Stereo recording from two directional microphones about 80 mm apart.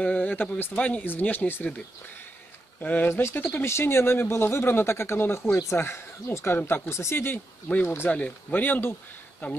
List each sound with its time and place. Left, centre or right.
0.0 s speech: centre
2.8 s speech: left
8.1 s speech: centre